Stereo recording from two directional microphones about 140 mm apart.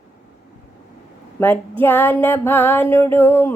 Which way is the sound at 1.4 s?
15° left (ahead or behind).